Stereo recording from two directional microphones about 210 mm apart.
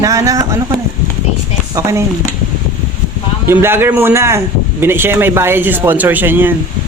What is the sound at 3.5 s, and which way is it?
A man's voice, 10° right (ahead or behind).